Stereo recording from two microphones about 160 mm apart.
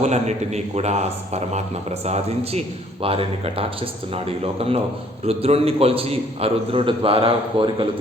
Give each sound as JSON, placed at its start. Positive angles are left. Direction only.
{"t": 0.0, "sound": "a man's voice", "side_deg": -45}